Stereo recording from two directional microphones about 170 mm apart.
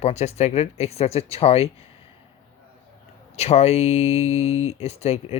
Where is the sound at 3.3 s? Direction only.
40° left (ahead or behind).